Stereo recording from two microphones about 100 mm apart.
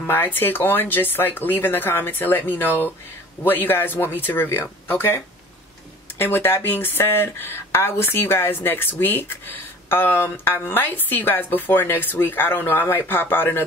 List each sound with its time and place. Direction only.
0.0 s speech: 20° left (ahead or behind)